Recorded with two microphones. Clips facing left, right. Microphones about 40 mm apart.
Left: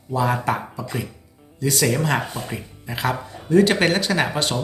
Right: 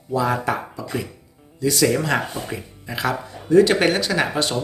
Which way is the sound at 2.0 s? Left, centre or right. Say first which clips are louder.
Even; left.